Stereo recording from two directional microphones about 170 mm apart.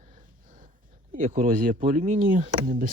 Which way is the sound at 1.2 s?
45° right (ahead or behind).